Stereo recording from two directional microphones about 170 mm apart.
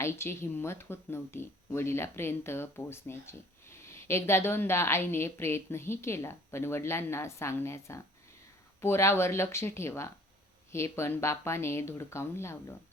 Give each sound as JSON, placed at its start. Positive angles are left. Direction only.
{"t": 0.0, "sound": "speech", "side_deg": 15}